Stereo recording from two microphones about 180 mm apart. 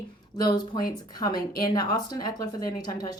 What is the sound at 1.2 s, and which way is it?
Speech, 20° left (ahead or behind).